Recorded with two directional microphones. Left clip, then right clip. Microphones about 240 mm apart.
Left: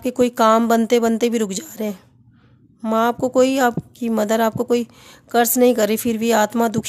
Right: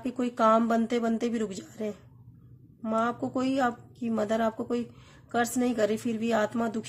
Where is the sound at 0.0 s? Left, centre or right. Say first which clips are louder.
Left 10 dB; left.